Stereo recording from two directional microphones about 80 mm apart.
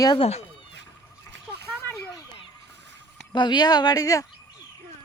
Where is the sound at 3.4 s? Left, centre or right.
Left.